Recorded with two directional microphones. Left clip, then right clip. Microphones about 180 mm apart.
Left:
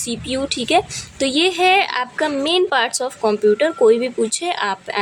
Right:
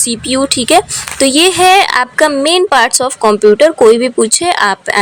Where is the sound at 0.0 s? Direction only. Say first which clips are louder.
Right 9 dB; 20° right (ahead or behind).